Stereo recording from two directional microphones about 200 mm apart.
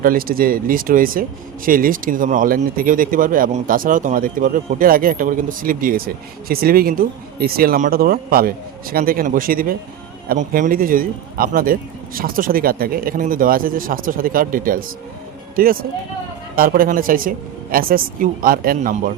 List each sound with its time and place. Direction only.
0.0 s a man's voice: 45° right (ahead or behind)